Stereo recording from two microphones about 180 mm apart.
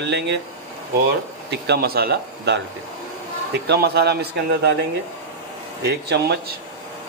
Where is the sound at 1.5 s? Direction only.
65° right (ahead or behind).